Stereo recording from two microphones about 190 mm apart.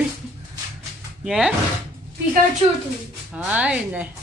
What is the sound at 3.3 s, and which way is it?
Speech, 5° right (ahead or behind).